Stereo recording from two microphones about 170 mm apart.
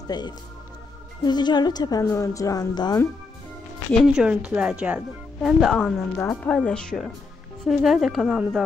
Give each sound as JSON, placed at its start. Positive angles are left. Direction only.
{"t": 1.2, "sound": "a woman's voice", "side_deg": 25}
{"t": 4.0, "sound": "speech", "side_deg": -5}